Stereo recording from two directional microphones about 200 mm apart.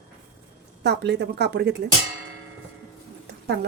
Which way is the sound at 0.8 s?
60° right (ahead or behind).